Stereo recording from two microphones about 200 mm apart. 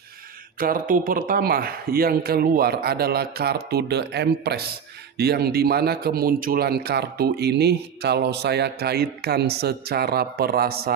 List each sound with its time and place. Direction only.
0.6 s speech: 45° right (ahead or behind)